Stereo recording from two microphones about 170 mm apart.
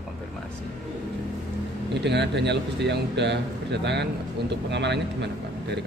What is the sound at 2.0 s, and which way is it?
Speech, 85° right.